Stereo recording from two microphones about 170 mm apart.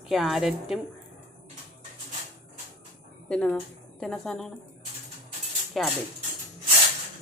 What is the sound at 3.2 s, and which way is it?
Speech, 5° left (ahead or behind).